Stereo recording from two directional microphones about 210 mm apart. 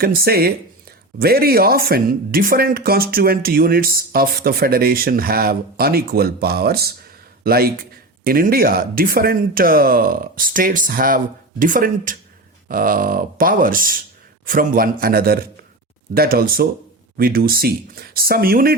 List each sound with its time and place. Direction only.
0.0 s speech: 45° right (ahead or behind)